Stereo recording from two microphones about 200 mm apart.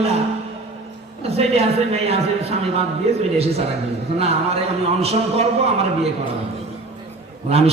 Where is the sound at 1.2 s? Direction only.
30° right (ahead or behind).